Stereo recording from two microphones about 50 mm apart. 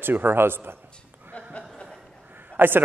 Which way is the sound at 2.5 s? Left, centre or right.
Right.